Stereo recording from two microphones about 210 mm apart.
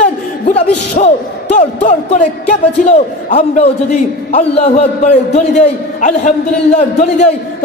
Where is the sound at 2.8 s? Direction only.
35° left (ahead or behind).